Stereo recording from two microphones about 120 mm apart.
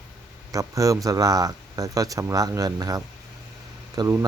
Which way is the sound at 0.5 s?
30° right (ahead or behind).